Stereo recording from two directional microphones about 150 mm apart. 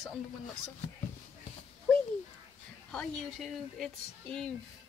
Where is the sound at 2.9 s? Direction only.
5° left (ahead or behind).